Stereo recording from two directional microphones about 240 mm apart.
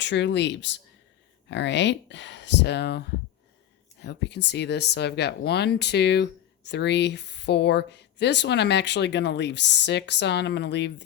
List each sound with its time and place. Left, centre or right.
0.0 s speech: left
4.0 s speech: left